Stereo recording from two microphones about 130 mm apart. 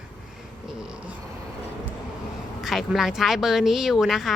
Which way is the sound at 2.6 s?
Centre (ahead or behind).